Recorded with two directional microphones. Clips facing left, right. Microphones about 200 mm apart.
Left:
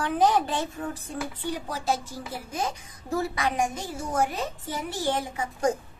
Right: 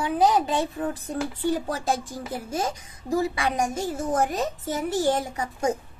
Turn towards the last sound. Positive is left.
turn(degrees=-45)  # may be behind; listen again after turning